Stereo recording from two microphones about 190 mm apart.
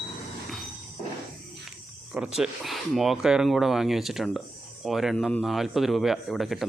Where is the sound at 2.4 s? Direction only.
Centre (ahead or behind).